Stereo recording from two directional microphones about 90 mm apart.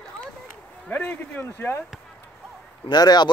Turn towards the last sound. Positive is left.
turn(degrees=50)  # may be behind; listen again after turning